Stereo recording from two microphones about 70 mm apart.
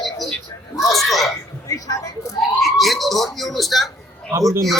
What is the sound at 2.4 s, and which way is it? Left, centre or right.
A man's voice, centre.